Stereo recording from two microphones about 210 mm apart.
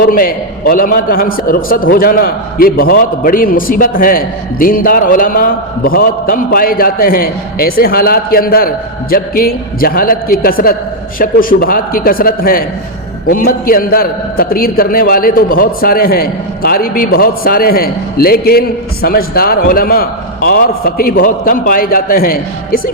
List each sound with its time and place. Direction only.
0.0 s a man's voice: 45° left (ahead or behind)